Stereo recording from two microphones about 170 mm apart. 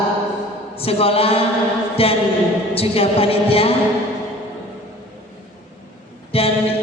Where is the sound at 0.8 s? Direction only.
35° left (ahead or behind).